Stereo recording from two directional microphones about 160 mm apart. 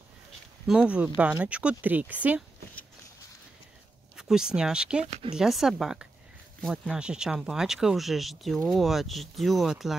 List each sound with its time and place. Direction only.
0.7 s speech: 5° right (ahead or behind)
4.2 s speech: 5° right (ahead or behind)
5.0 s speech: 40° right (ahead or behind)
5.3 s speech: 5° right (ahead or behind)